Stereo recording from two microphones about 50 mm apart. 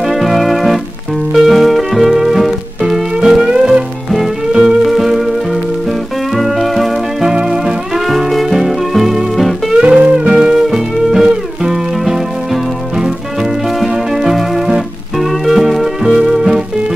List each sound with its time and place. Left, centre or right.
0.0 s music: centre
9.8 s music: centre
10.7 s music: centre